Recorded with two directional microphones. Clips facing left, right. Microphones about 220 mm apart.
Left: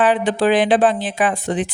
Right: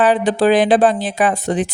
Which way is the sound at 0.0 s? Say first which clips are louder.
Right 2 dB; 40° right (ahead or behind).